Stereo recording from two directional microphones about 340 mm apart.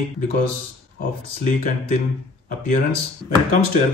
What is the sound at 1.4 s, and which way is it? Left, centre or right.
Speech, left.